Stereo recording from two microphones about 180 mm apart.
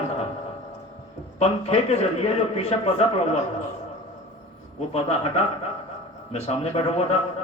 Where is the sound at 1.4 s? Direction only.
35° left (ahead or behind).